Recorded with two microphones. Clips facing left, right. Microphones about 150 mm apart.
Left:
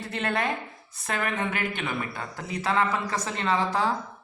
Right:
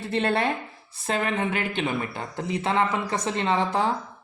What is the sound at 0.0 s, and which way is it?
A woman's voice, 30° right (ahead or behind).